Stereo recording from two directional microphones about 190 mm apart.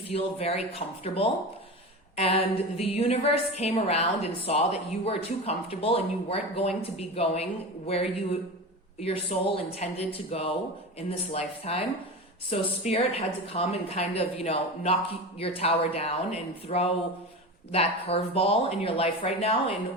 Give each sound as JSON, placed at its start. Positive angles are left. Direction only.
{"t": 0.1, "sound": "a woman's voice", "side_deg": 35}